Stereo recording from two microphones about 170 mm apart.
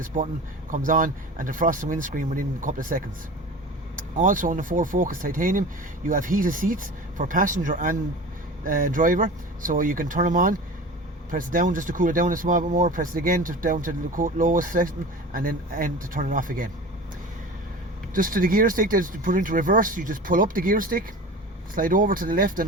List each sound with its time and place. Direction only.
0.0 s speech: 50° right (ahead or behind)
18.1 s speech: 55° right (ahead or behind)